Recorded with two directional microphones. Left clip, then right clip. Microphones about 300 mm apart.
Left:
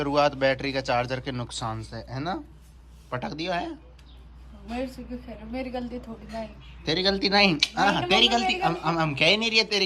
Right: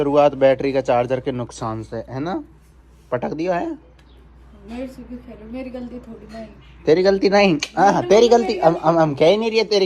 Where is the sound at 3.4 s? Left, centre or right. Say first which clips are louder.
Right 5 dB; centre.